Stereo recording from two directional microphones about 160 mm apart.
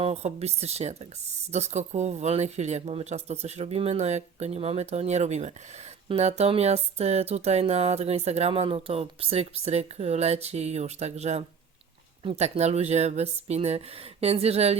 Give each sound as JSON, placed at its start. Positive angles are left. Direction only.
{"t": 0.0, "sound": "speech", "side_deg": -40}